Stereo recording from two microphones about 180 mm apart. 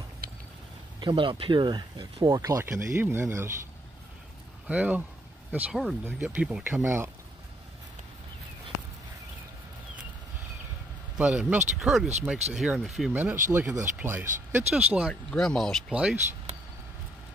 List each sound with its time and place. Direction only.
1.0 s speech: 25° right (ahead or behind)
4.6 s speech: 10° right (ahead or behind)
11.1 s speech: 5° right (ahead or behind)